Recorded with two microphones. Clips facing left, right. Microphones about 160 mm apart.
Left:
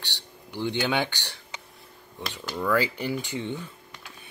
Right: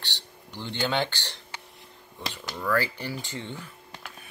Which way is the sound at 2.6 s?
15° left (ahead or behind).